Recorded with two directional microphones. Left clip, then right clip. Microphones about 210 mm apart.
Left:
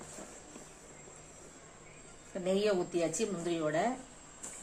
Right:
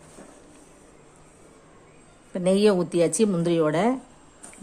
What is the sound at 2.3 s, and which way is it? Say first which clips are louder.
Speech: right 11 dB; 40° right (ahead or behind).